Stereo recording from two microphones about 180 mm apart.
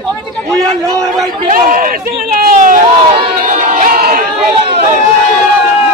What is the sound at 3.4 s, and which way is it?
Crowd, 45° right (ahead or behind).